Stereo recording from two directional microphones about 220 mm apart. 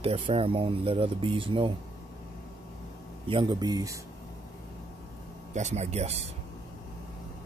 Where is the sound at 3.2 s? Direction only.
20° right (ahead or behind).